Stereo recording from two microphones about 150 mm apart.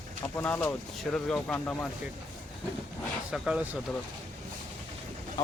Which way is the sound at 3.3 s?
5° right (ahead or behind).